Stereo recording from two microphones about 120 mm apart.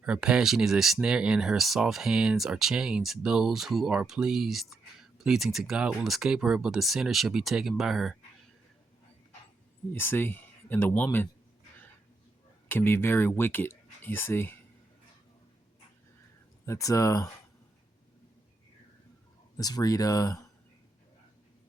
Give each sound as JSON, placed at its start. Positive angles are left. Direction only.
{"t": 0.0, "sound": "speech", "side_deg": -5}
{"t": 9.9, "sound": "speech", "side_deg": 20}
{"t": 12.6, "sound": "speech", "side_deg": 20}
{"t": 16.6, "sound": "speech", "side_deg": 25}
{"t": 19.5, "sound": "speech", "side_deg": 30}